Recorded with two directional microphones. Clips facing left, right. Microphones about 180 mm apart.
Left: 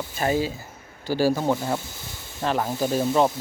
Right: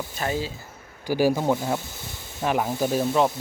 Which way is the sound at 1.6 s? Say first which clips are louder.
Even; centre (ahead or behind).